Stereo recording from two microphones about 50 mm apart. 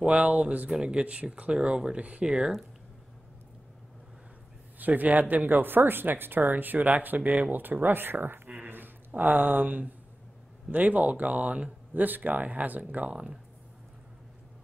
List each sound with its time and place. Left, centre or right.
0.0 s speech: right
0.7 s speech: centre
0.9 s speech: right
4.7 s speech: right
8.5 s a sound: right
10.7 s speech: right
13.1 s speech: right